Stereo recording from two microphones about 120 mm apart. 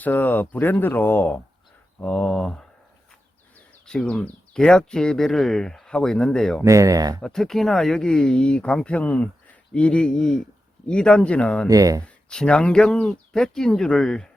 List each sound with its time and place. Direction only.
0.0 s speech: 15° left (ahead or behind)
3.8 s speech: 5° left (ahead or behind)
6.6 s speech: 25° right (ahead or behind)
7.2 s speech: 5° left (ahead or behind)
11.7 s speech: 30° right (ahead or behind)
12.0 s speech: 10° left (ahead or behind)